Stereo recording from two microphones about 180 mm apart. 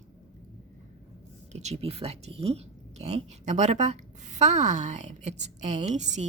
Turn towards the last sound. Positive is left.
turn(degrees=-40)  # may be behind; listen again after turning